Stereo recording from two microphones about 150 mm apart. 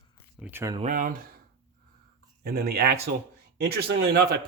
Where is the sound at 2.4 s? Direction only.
90° right.